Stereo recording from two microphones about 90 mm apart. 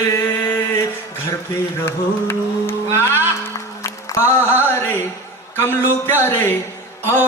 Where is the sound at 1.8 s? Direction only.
25° left (ahead or behind).